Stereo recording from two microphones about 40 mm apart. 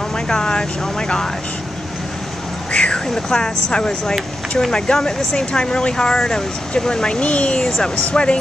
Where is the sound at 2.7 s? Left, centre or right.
Left.